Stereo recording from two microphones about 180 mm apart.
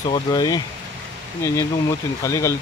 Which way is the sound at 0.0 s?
25° left (ahead or behind).